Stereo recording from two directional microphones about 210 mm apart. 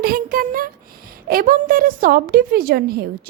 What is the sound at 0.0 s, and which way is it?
A woman's voice, 45° right (ahead or behind).